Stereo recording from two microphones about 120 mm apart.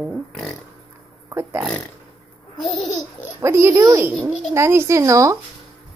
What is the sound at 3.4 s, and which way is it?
Speech, 25° right (ahead or behind).